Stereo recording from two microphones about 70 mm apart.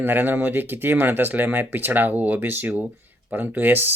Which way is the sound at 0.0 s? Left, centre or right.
Right.